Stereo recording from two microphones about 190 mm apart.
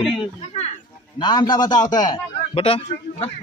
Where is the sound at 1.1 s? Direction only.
20° left (ahead or behind).